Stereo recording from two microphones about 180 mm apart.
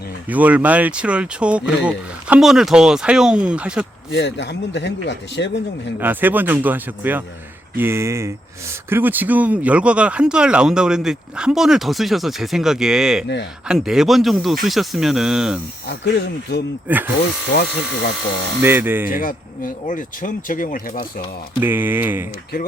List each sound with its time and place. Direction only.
0.3 s speech: 10° right (ahead or behind)
4.1 s speech: 80° left
6.0 s speech: 10° right (ahead or behind)
15.9 s speech: 70° left (ahead or behind)
16.9 s speech: 10° right (ahead or behind)
17.5 s speech: 60° left (ahead or behind)
18.6 s speech: 10° right (ahead or behind)
19.1 s speech: 50° left (ahead or behind)
21.6 s speech: 10° right (ahead or behind)